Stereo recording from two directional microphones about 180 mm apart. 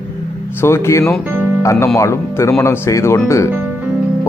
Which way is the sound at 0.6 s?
15° left (ahead or behind).